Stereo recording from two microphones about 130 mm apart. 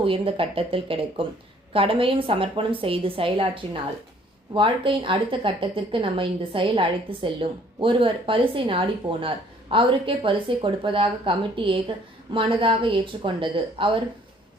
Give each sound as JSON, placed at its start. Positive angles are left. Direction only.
{"t": 0.0, "sound": "a woman's voice", "side_deg": -45}